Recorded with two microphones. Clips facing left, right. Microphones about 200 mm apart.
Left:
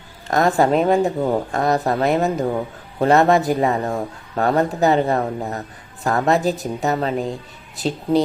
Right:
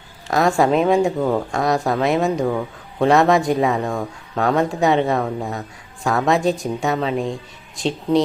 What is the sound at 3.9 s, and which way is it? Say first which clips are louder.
Speech: even; 20° left (ahead or behind).